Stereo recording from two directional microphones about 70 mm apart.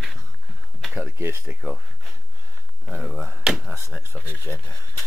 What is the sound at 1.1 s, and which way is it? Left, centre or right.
Speech, right.